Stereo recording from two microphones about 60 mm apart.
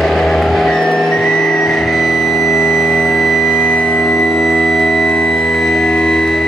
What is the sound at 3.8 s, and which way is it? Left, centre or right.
Music, centre.